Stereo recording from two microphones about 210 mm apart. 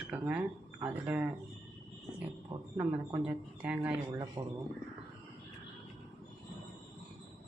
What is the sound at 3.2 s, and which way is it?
Speech, 5° right (ahead or behind).